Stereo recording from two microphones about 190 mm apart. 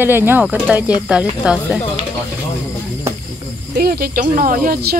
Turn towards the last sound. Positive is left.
turn(degrees=-50)  # may be behind; listen again after turning